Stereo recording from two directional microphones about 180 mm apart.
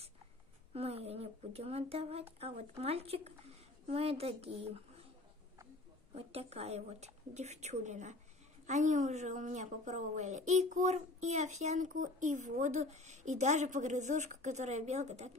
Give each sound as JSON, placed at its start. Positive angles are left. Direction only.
{"t": 0.7, "sound": "a woman's voice", "side_deg": -35}
{"t": 6.1, "sound": "a woman's voice", "side_deg": -35}